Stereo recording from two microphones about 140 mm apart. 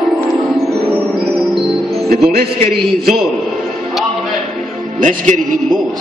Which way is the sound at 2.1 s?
90° right.